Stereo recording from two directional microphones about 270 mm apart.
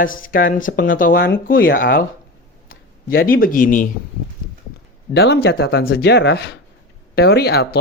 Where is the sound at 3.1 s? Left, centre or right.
Left.